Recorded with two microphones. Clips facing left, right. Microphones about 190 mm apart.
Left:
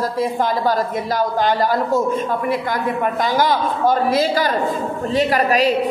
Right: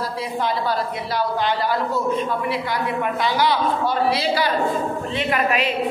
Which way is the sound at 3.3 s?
45° left (ahead or behind).